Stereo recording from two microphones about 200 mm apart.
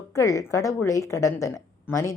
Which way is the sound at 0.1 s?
15° left (ahead or behind).